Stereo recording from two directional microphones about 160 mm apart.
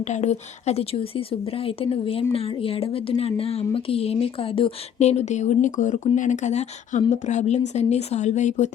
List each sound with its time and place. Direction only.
0.0 s speech: 45° left (ahead or behind)